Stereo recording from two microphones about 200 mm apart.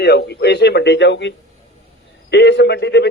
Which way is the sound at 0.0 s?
55° left (ahead or behind).